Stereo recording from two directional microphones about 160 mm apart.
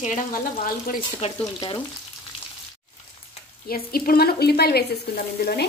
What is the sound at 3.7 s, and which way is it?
A woman's voice, 65° left (ahead or behind).